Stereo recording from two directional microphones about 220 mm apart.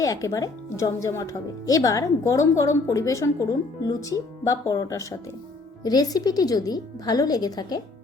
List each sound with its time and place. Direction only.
0.0 s speech: 15° left (ahead or behind)